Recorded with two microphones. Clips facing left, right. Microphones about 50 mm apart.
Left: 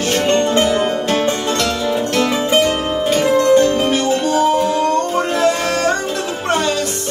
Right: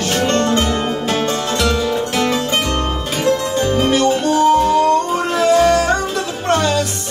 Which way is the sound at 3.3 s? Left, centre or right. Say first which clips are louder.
Left 7 dB; left.